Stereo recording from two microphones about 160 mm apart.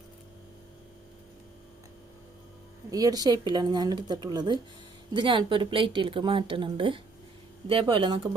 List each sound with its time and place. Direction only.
2.9 s a woman's voice: 25° right (ahead or behind)